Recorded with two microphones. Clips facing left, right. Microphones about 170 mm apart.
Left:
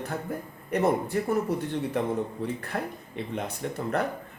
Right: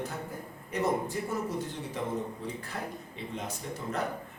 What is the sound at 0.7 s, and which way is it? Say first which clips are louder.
A man's voice: left 5 dB; 60° left (ahead or behind).